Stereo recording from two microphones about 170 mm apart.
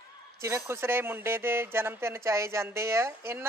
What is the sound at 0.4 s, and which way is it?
Speech, 15° right (ahead or behind).